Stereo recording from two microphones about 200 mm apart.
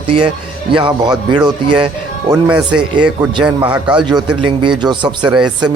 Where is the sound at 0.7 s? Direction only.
25° right (ahead or behind).